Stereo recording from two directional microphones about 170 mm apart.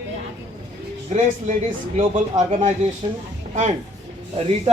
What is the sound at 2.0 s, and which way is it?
Speech, 45° right (ahead or behind).